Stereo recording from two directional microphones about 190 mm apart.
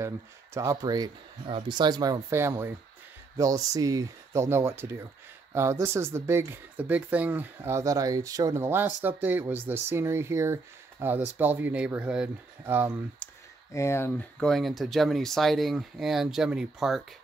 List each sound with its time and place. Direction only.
0.6 s speech: 20° right (ahead or behind)
13.2 s a sound: 5° left (ahead or behind)
13.7 s speech: 15° left (ahead or behind); by 17.0 s 5° right (ahead or behind)